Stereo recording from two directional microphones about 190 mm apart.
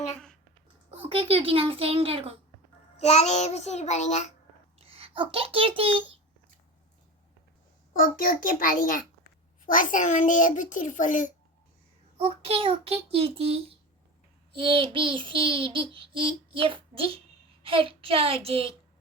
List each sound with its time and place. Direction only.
0.9 s a child's voice: 30° right (ahead or behind)
3.0 s a child's voice: 35° left (ahead or behind)
4.8 s a child's voice: 30° right (ahead or behind)
7.9 s a child's voice: 45° left (ahead or behind)
12.1 s a child's voice: 30° right (ahead or behind)
14.5 s child singing: 25° right (ahead or behind)